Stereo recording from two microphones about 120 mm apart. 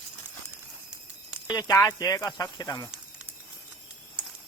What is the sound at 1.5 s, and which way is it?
Speech, 30° left (ahead or behind).